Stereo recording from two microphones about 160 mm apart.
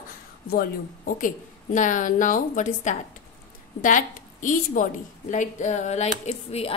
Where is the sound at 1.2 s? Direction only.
55° left (ahead or behind).